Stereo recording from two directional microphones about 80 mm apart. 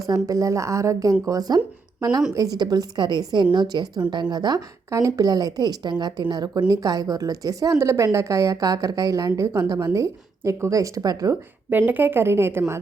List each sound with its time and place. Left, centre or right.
0.1 s a woman's voice: right
4.9 s a woman's voice: right
11.7 s a woman's voice: right